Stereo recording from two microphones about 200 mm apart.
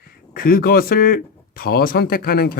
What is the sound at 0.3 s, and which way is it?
Speech, 45° left (ahead or behind).